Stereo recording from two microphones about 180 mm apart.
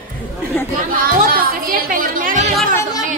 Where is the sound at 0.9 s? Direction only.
50° right (ahead or behind).